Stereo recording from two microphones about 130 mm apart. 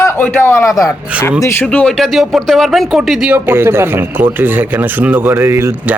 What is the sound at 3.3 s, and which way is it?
Speech, 15° right (ahead or behind).